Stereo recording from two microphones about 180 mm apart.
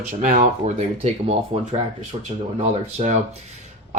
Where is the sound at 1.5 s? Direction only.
35° right (ahead or behind).